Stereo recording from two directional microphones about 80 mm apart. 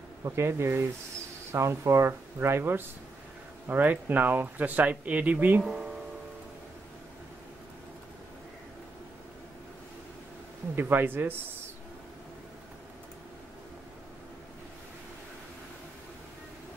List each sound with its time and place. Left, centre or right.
0.2 s speech: right
5.6 s speech: centre
10.8 s speech: right